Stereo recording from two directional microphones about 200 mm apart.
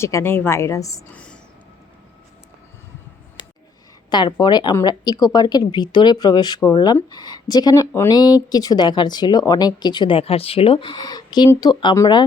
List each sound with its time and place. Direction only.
0.0 s a woman's voice: 15° left (ahead or behind)
4.1 s speech: 20° left (ahead or behind)